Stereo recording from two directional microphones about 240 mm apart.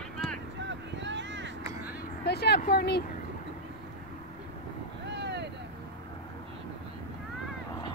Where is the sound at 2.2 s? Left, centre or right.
Left.